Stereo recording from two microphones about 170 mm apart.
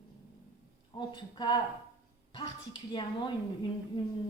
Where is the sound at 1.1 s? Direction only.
25° left (ahead or behind).